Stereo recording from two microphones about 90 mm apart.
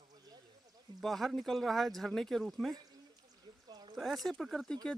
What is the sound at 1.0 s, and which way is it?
Speech, 5° left (ahead or behind).